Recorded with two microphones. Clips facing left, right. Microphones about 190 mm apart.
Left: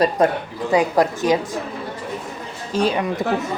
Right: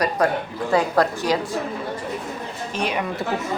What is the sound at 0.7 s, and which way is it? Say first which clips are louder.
Speech: left 2 dB; 15° left (ahead or behind).